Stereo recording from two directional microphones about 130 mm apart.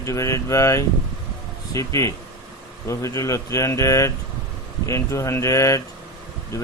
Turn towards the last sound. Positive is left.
turn(degrees=25)  # may be behind; listen again after turning